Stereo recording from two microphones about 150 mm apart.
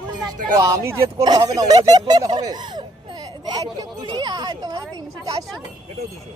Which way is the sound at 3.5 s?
25° right (ahead or behind).